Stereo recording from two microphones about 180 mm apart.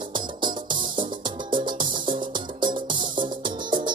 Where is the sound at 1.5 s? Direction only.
50° right (ahead or behind).